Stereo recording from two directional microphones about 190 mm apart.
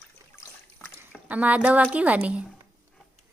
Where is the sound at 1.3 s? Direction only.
10° right (ahead or behind).